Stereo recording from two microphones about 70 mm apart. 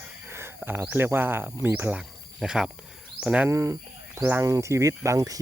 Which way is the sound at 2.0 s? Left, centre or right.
Centre.